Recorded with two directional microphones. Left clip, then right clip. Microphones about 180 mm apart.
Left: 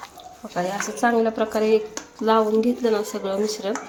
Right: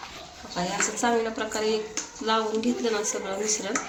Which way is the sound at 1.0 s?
55° left (ahead or behind).